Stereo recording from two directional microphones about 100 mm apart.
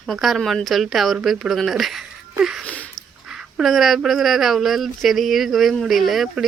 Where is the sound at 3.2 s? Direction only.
5° right (ahead or behind).